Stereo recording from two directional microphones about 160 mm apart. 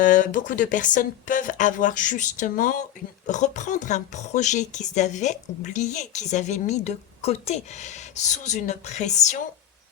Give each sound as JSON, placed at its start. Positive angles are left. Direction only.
{"t": 0.0, "sound": "a woman's voice", "side_deg": 55}